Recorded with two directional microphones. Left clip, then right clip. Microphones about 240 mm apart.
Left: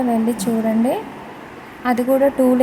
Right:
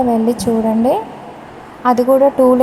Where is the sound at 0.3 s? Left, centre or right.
Centre.